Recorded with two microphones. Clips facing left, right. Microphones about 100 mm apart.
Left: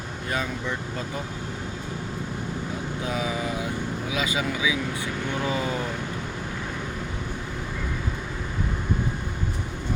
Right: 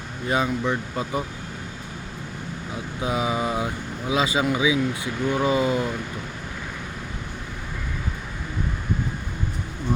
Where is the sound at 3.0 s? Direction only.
20° right (ahead or behind).